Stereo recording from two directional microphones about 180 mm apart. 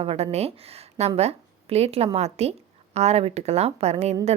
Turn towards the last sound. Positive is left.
turn(degrees=-35)  # may be behind; listen again after turning